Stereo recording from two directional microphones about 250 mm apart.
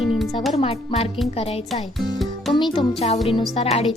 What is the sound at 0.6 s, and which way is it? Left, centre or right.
Speech, left.